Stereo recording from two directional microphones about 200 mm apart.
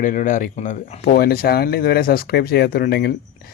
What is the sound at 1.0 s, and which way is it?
Speech, 50° left (ahead or behind).